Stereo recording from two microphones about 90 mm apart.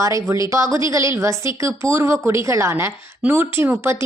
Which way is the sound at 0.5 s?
35° right (ahead or behind).